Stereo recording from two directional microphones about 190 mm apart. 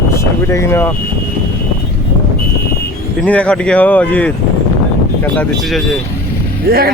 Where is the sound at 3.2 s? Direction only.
5° left (ahead or behind).